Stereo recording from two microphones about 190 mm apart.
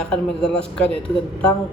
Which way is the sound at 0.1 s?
5° left (ahead or behind).